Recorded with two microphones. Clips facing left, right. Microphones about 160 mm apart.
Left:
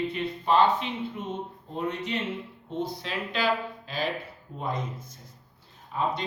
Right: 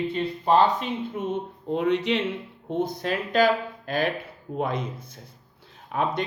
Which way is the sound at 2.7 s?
50° right (ahead or behind).